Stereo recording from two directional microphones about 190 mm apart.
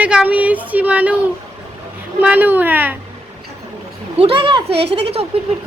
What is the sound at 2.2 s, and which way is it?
Speech, 10° right (ahead or behind).